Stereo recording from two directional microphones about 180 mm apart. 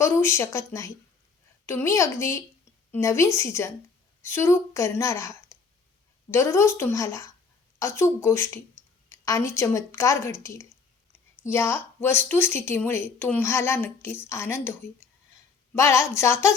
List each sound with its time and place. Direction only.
0.0 s a woman's voice: 15° left (ahead or behind)